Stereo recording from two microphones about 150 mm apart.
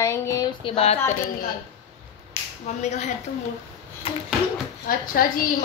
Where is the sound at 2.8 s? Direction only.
50° left (ahead or behind).